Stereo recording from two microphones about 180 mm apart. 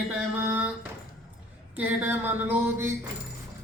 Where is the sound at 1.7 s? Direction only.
10° right (ahead or behind).